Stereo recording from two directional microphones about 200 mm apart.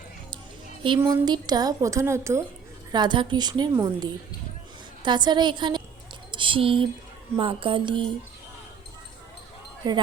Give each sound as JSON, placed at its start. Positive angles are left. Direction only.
{"t": 0.9, "sound": "a woman's voice", "side_deg": -15}
{"t": 6.3, "sound": "a sound", "side_deg": -25}
{"t": 7.3, "sound": "a woman's voice", "side_deg": -25}
{"t": 9.8, "sound": "a woman's voice", "side_deg": -20}